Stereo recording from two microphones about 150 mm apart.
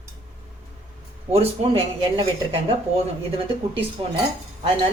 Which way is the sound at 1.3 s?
40° right (ahead or behind).